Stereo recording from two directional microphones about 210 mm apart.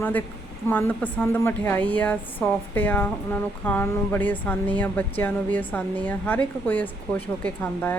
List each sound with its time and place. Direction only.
0.0 s a woman's voice: 10° left (ahead or behind)